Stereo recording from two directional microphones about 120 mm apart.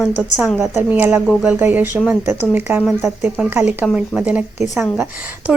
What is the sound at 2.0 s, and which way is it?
Speech, 5° right (ahead or behind).